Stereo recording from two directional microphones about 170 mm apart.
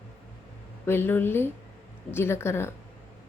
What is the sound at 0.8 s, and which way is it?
Speech, 15° left (ahead or behind).